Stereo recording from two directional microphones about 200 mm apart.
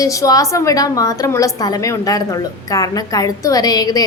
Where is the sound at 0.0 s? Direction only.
15° left (ahead or behind).